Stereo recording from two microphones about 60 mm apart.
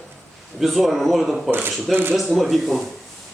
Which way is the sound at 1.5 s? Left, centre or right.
Right.